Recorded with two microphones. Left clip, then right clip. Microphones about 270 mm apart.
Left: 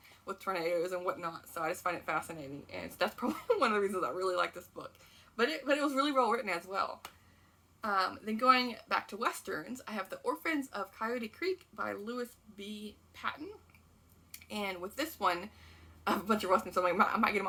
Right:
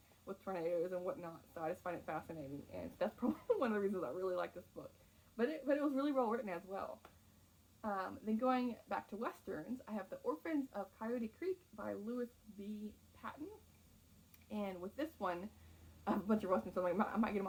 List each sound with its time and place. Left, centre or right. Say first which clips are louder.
0.3 s speech: left 7 dB; centre
14.5 s speech: left 7 dB; centre